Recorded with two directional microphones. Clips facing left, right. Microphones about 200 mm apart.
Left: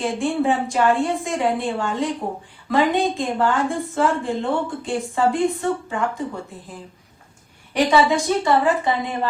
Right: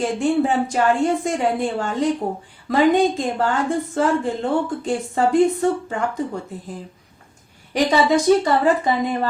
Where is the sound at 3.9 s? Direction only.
40° right (ahead or behind).